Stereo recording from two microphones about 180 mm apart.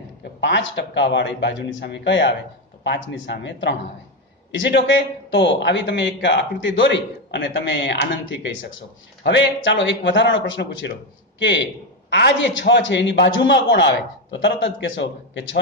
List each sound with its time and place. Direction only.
0.2 s a man's voice: 80° left